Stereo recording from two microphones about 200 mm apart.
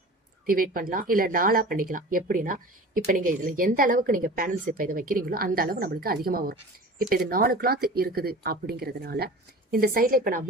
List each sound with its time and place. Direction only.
0.4 s speech: 45° right (ahead or behind)